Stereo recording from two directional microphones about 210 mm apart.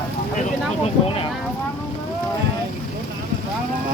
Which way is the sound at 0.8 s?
25° left (ahead or behind).